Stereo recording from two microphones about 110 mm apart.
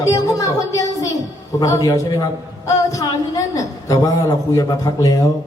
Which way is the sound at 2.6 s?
30° left (ahead or behind).